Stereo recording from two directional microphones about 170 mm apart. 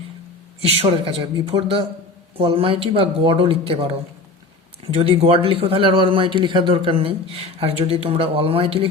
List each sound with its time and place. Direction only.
0.6 s speech: 35° right (ahead or behind)
4.9 s speech: 35° right (ahead or behind)